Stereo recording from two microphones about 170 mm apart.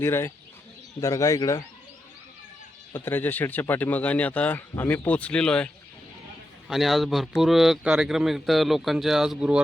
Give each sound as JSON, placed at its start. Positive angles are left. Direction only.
{"t": 0.0, "sound": "speech", "side_deg": 15}
{"t": 2.9, "sound": "speech", "side_deg": 10}